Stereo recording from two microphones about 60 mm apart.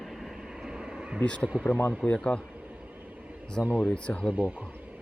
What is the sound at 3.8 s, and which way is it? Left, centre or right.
Speech, centre.